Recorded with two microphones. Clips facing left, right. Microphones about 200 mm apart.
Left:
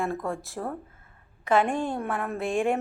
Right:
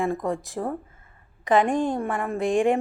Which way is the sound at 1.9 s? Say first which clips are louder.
Right 3 dB; centre (ahead or behind).